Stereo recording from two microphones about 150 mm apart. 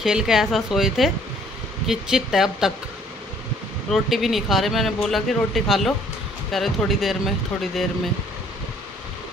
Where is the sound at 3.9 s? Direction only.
Centre (ahead or behind).